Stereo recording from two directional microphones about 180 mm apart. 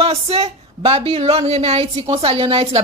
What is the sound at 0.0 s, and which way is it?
Speech, 35° right (ahead or behind).